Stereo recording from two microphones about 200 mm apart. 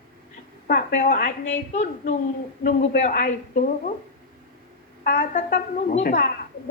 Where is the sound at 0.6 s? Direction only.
45° left (ahead or behind).